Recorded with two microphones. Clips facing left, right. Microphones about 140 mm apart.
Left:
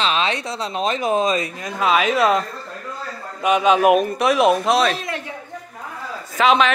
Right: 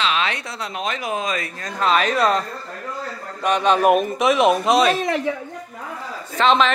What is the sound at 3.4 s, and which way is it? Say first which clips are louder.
Speech: left 2 dB; 5° left (ahead or behind).